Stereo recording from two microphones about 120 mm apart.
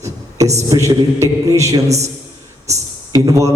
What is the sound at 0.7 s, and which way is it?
A man's voice, 25° right (ahead or behind).